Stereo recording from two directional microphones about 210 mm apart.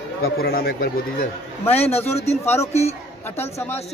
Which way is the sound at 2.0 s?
30° left (ahead or behind).